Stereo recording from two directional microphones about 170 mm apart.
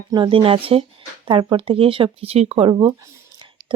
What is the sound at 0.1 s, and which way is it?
Speech, 30° right (ahead or behind).